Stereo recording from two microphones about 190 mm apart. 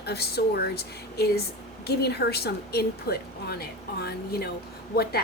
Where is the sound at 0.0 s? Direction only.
60° left (ahead or behind).